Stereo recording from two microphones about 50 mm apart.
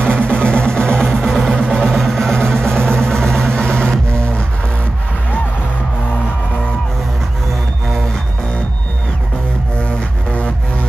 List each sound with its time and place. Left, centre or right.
0.0 s music: centre
1.2 s music: centre
1.8 s vehicle: centre
9.8 s music: left